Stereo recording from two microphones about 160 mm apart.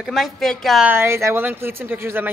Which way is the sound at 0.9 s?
15° right (ahead or behind).